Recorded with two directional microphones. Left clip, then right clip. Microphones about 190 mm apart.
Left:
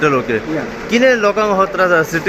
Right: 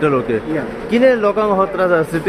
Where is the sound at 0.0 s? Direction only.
10° right (ahead or behind).